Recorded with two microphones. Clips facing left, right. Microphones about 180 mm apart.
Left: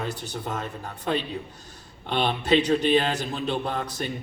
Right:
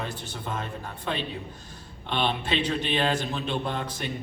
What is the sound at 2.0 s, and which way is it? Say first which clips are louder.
A man's voice: left 3 dB; 40° left (ahead or behind).